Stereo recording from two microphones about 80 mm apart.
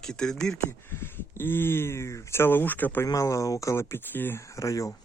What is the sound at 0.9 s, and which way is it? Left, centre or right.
Speech, left.